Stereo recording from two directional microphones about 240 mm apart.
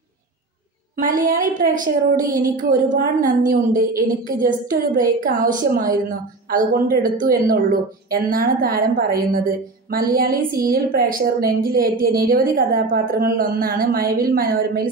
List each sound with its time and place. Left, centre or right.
1.0 s a woman's voice: right